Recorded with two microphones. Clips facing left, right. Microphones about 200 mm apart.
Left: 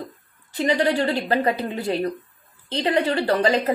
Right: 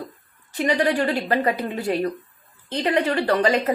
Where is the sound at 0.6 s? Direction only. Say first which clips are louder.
Even; 25° left (ahead or behind).